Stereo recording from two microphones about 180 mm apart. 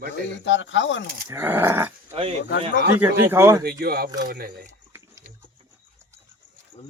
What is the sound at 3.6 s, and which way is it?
Speech, 60° right (ahead or behind).